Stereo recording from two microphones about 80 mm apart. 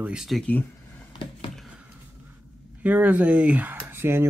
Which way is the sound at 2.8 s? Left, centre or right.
Right.